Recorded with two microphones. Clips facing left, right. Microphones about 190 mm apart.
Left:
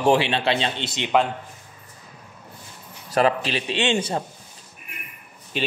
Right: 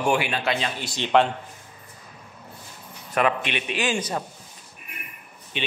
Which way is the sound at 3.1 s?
35° left (ahead or behind).